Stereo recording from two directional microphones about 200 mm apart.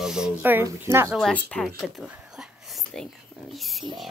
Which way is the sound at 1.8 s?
Centre (ahead or behind).